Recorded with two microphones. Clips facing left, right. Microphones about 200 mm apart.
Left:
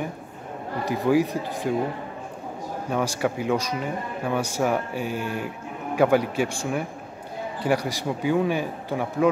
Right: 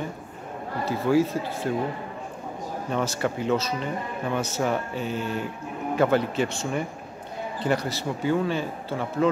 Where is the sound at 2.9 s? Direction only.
10° left (ahead or behind).